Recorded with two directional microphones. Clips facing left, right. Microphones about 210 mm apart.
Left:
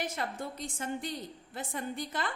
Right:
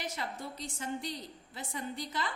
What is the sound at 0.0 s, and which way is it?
A woman's voice, 50° left (ahead or behind).